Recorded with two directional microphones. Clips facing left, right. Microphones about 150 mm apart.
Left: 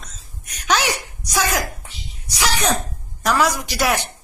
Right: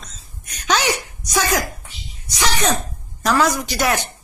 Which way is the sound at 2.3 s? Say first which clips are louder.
Right 1 dB; 10° left (ahead or behind).